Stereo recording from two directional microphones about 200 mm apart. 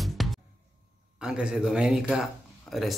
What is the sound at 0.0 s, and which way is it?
Music, centre (ahead or behind).